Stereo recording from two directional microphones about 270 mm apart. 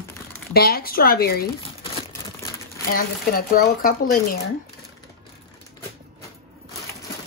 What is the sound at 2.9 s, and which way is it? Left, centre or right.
Speech, left.